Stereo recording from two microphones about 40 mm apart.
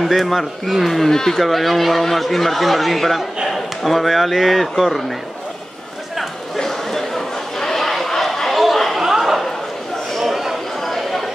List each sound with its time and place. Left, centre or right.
0.0 s a man's voice: centre
6.6 s a sound: centre
10.8 s chatter: centre